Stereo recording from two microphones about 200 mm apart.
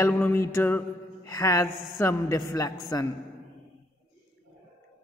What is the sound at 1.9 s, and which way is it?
A man's voice, 15° left (ahead or behind).